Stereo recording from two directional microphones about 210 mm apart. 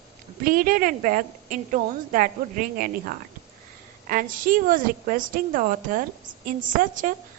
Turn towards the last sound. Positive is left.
turn(degrees=-40)  # may be behind; listen again after turning